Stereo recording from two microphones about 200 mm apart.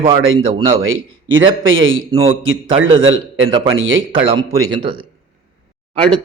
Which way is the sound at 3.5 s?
25° right (ahead or behind).